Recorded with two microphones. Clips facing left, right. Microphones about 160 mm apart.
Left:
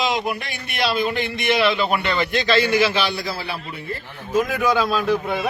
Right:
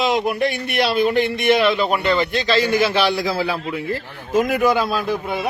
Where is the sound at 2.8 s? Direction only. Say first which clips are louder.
Right 3 dB; 70° right (ahead or behind).